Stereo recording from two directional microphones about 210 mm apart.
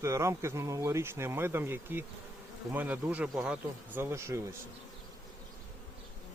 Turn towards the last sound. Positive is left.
turn(degrees=-15)  # may be behind; listen again after turning